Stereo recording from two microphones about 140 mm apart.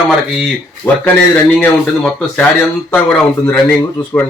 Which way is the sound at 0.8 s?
20° left (ahead or behind).